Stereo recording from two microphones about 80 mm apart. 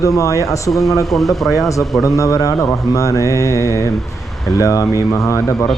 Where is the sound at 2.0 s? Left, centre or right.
Left.